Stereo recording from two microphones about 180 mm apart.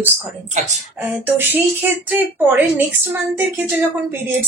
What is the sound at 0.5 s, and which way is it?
Speech, 40° right (ahead or behind).